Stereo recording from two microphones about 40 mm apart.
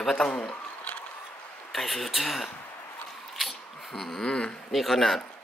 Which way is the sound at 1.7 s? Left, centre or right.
Centre.